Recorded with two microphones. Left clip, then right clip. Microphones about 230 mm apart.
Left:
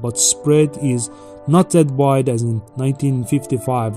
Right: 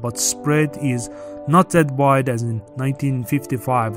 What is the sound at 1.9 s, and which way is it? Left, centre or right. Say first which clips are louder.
Speech: even; right.